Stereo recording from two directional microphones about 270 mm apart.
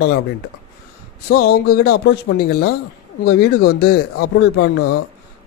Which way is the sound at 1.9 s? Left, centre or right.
Left.